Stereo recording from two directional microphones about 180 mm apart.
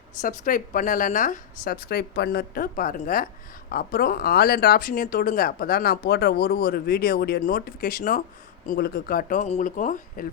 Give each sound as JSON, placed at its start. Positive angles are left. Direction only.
{"t": 0.2, "sound": "a woman's voice", "side_deg": 45}